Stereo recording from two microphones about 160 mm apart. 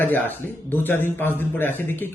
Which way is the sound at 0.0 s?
10° left (ahead or behind).